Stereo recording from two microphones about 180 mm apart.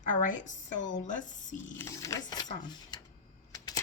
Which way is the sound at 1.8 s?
15° left (ahead or behind).